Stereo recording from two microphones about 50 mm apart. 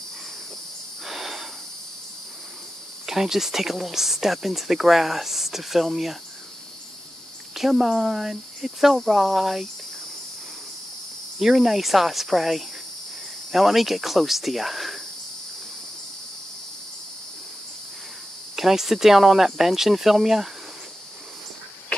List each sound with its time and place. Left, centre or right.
1.0 s a sound: centre
3.1 s speech: centre
7.5 s speech: centre
11.3 s speech: centre
18.6 s speech: centre